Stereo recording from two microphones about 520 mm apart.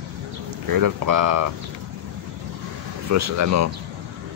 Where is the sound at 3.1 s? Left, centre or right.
Right.